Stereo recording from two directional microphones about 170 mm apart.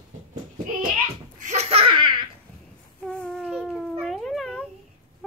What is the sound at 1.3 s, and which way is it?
Laughter, 40° right (ahead or behind).